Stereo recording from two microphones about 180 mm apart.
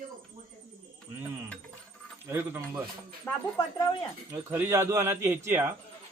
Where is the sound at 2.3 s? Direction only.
15° right (ahead or behind).